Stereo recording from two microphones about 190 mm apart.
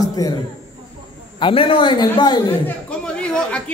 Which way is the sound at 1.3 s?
25° left (ahead or behind).